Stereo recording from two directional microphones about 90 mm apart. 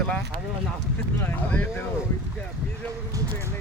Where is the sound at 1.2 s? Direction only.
20° left (ahead or behind).